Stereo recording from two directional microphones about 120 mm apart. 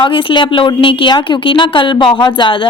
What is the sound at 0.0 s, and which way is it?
Speech, 45° left (ahead or behind).